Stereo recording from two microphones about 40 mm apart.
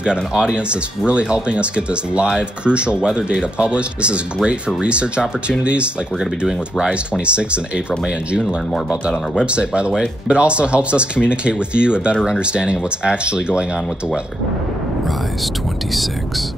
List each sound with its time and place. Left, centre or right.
0.0 s speech: right
6.1 s speech: centre
6.9 s speech: right
9.4 s speech: right